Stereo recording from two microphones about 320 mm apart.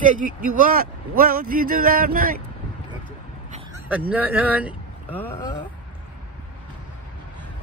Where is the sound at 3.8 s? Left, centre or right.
Centre.